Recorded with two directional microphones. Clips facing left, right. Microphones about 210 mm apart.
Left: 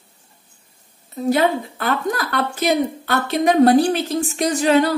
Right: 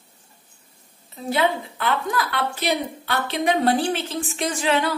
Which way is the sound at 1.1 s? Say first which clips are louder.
Left 5 dB; 45° left (ahead or behind).